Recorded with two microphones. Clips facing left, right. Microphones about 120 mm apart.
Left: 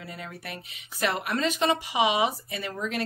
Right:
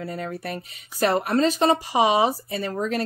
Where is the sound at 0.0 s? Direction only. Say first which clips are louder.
Right 9 dB; 40° right (ahead or behind).